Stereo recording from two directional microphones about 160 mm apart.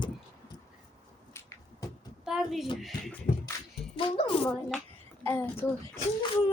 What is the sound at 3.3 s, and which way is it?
Beatboxing, 50° left (ahead or behind).